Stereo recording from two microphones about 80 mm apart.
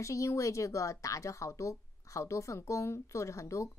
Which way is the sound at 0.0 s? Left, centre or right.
Left.